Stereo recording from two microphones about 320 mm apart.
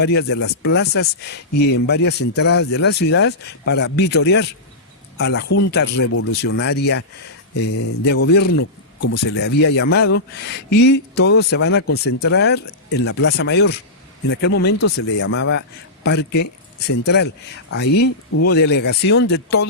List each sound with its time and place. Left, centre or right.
0.0 s speech: left
9.0 s speech: left
9.3 s speech: left